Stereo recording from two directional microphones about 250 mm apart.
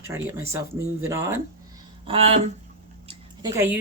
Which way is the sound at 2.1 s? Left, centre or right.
Right.